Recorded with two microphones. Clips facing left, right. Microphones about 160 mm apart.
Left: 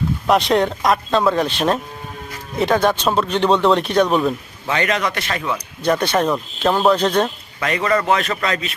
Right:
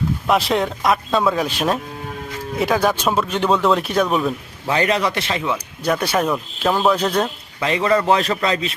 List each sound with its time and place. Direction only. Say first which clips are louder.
0.3 s speech: left 3 dB; centre (ahead or behind)
4.7 s a man's voice: right 1 dB; 30° right (ahead or behind)
5.4 s speech: right 1 dB; 10° right (ahead or behind)